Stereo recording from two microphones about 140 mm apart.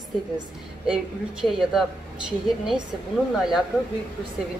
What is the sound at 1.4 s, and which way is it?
Speech, centre (ahead or behind).